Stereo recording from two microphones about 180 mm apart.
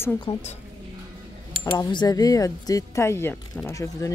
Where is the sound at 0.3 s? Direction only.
35° left (ahead or behind).